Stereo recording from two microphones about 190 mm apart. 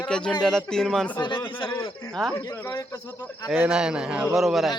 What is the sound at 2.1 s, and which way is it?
Speech, centre (ahead or behind).